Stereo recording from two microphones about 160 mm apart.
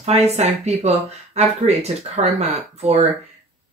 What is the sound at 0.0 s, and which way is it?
Speech, 40° right (ahead or behind).